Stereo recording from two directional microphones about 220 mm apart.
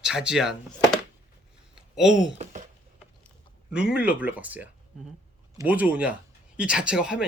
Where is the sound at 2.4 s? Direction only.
35° right (ahead or behind).